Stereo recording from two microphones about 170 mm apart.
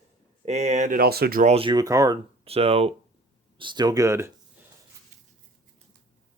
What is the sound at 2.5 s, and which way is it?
Speech, 35° right (ahead or behind).